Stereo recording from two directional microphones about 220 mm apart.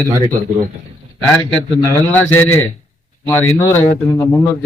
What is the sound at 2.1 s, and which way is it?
A man's voice, 10° left (ahead or behind).